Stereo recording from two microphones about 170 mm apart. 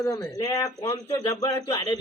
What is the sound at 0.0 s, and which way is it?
Speech, 20° left (ahead or behind).